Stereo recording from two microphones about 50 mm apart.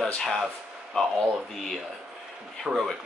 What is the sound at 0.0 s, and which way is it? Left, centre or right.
Speech, centre.